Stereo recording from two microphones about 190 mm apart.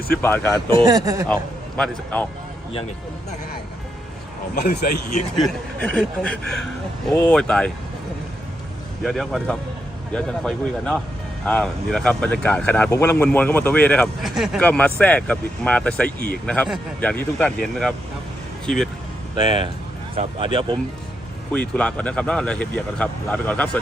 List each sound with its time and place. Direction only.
0.2 s speech: 10° left (ahead or behind)
0.8 s speech: 20° right (ahead or behind)
1.3 s a man's voice: 5° left (ahead or behind)
4.5 s speech: 55° left (ahead or behind)
5.4 s speech: 5° left (ahead or behind)
9.0 s speech: centre (ahead or behind)
20.1 s speech: 30° right (ahead or behind)
21.5 s speech: 5° left (ahead or behind)